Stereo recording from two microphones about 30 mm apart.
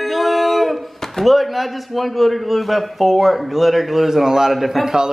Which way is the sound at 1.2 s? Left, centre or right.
Centre.